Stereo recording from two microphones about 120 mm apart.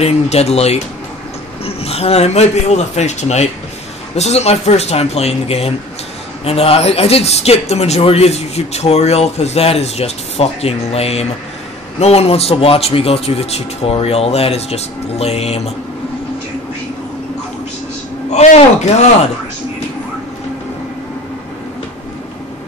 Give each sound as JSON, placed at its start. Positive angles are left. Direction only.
{"t": 0.0, "sound": "speech", "side_deg": 60}
{"t": 18.3, "sound": "speech", "side_deg": 70}